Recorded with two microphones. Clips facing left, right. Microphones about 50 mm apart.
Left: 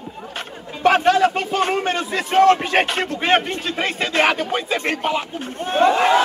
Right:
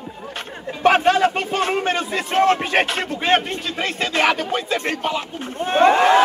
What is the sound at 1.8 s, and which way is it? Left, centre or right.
A man's voice, centre.